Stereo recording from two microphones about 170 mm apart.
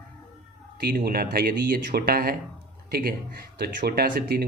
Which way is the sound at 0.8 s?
70° right (ahead or behind).